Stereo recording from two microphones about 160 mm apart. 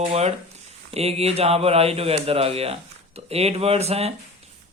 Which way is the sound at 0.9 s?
40° right (ahead or behind).